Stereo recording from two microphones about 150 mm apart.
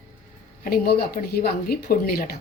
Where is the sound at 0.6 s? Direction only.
80° left.